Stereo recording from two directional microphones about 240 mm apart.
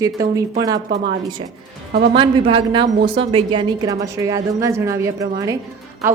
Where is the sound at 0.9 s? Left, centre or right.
Right.